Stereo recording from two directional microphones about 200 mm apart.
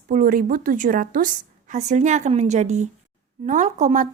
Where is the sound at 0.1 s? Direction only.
45° right (ahead or behind).